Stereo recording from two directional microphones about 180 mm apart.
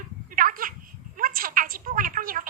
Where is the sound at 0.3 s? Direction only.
50° right (ahead or behind).